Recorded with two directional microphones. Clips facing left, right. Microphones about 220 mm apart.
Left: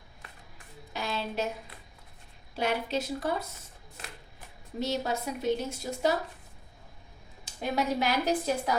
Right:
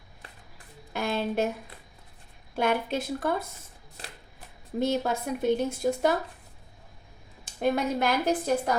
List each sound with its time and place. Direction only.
0.9 s a sound: 50° right (ahead or behind)
2.6 s a woman's voice: 55° right (ahead or behind)
4.8 s a woman's voice: 55° right (ahead or behind)
7.4 s a woman's voice: 55° right (ahead or behind)